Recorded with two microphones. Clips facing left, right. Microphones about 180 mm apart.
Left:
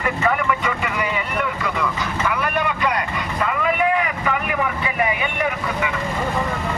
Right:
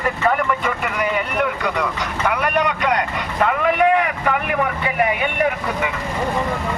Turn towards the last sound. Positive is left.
turn(degrees=-55)  # may be behind; listen again after turning